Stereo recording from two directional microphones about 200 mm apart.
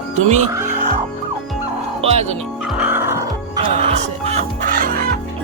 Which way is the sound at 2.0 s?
30° right (ahead or behind).